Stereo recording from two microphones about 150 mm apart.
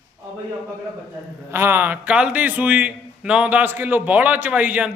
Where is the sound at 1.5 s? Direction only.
15° right (ahead or behind).